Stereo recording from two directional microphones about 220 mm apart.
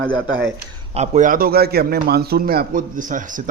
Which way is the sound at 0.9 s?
35° right (ahead or behind).